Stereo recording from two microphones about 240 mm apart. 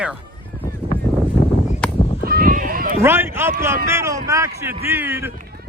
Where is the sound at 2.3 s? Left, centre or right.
Right.